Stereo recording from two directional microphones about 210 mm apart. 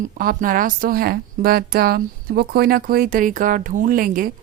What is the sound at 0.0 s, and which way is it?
Speech, 40° right (ahead or behind).